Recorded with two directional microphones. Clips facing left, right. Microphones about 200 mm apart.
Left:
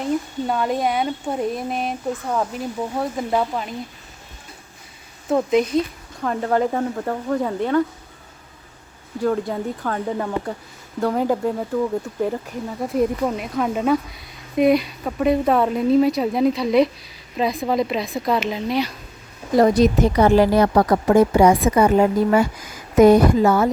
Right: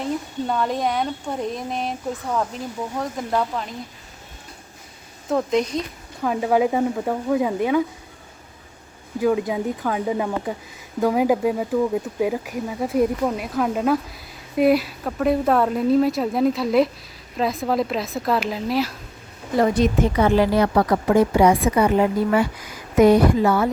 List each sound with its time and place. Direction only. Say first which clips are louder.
0.0 s speech: left 3 dB; 5° left (ahead or behind)
5.3 s speech: left 3 dB; 5° left (ahead or behind)
6.2 s speech: right 1 dB; 10° right (ahead or behind)
9.2 s speech: right 1 dB; 10° right (ahead or behind)
19.5 s a woman's voice: left 3 dB; 40° left (ahead or behind)